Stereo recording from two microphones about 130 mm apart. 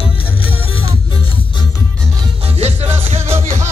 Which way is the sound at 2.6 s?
50° right (ahead or behind).